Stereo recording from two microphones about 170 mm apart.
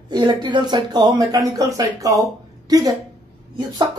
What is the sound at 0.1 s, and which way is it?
A woman's voice, 25° right (ahead or behind).